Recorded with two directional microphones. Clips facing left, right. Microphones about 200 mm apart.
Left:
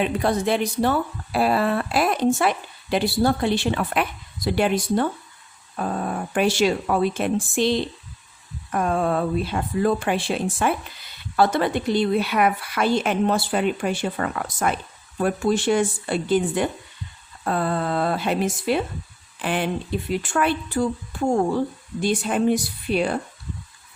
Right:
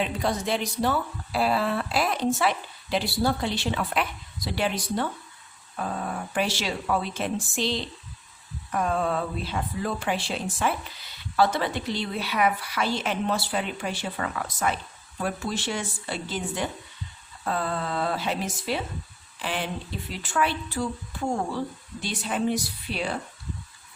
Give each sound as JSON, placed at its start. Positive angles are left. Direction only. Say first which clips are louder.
{"t": 0.0, "sound": "speech", "louder": "left 5 dB", "side_deg": 55}